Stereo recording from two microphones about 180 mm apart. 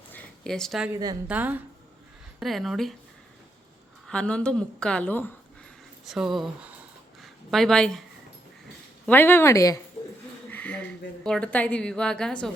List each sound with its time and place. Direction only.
0.1 s a sound: 5° left (ahead or behind)
0.9 s a woman's voice: 20° right (ahead or behind)
1.3 s a woman's voice: 10° right (ahead or behind)
4.0 s a woman's voice: 5° left (ahead or behind)
6.1 s a woman's voice: centre (ahead or behind)
9.0 s speech: 10° left (ahead or behind)
10.5 s a sound: 10° left (ahead or behind)
11.2 s a woman's voice: 5° left (ahead or behind)